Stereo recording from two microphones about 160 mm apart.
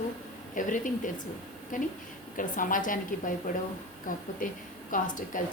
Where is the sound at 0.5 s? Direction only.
55° left (ahead or behind).